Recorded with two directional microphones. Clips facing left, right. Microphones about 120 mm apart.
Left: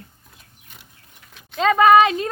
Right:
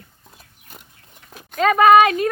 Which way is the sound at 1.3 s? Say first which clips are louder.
Right 8 dB; 45° right (ahead or behind).